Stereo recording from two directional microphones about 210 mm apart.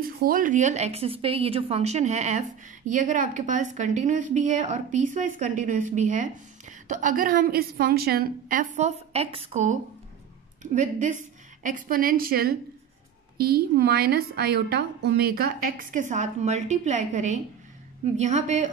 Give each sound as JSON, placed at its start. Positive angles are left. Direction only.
{"t": 0.0, "sound": "a woman's voice", "side_deg": -45}